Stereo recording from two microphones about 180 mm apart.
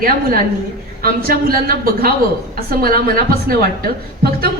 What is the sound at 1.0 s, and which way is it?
A man's voice, 55° right (ahead or behind).